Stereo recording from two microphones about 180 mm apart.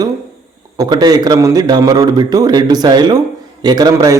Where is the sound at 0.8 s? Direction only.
20° right (ahead or behind).